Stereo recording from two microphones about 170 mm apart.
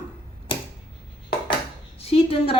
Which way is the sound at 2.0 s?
35° left (ahead or behind).